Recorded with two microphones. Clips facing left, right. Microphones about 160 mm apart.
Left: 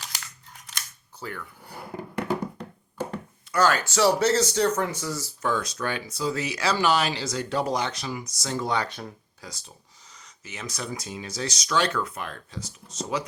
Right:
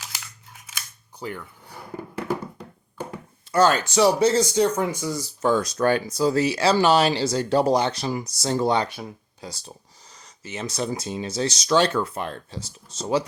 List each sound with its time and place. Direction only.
0.5 s scissors: 5° right (ahead or behind)
1.2 s speech: 20° right (ahead or behind)
3.5 s speech: 25° right (ahead or behind)
5.4 s speech: 35° right (ahead or behind)
8.9 s speech: 10° right (ahead or behind)
9.4 s speech: 30° right (ahead or behind)